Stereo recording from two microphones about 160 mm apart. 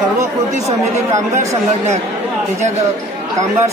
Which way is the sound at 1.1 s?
20° right (ahead or behind).